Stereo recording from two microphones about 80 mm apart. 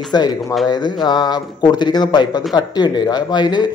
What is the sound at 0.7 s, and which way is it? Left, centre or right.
Speech, left.